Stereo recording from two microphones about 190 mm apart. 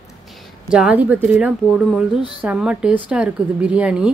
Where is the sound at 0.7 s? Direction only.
5° right (ahead or behind).